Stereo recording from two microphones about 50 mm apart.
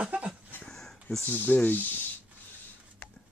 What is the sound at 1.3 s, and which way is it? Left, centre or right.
Speech, left.